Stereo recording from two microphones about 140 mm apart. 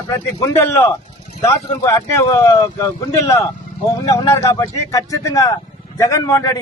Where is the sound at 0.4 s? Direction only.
15° left (ahead or behind).